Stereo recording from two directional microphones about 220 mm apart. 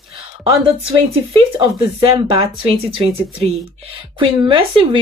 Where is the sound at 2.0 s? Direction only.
25° right (ahead or behind).